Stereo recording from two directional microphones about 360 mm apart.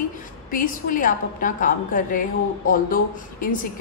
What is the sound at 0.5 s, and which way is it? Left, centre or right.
A woman's voice, left.